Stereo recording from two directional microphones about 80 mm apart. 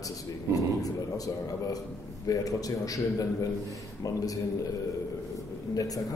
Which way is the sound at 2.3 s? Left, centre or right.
Left.